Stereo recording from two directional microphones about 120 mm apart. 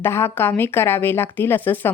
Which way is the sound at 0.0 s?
20° left (ahead or behind).